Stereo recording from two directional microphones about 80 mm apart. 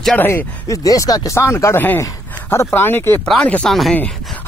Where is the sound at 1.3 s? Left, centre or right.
Left.